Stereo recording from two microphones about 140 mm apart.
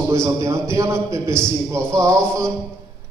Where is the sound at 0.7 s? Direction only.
20° right (ahead or behind).